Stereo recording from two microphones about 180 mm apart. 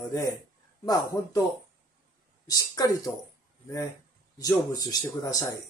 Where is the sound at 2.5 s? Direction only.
20° left (ahead or behind).